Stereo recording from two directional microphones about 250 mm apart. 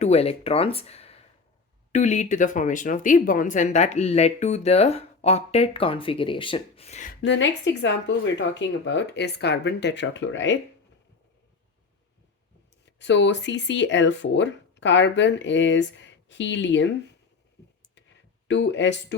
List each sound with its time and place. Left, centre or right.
0.0 s speech: left
7.2 s speech: left
13.0 s speech: left
18.4 s speech: left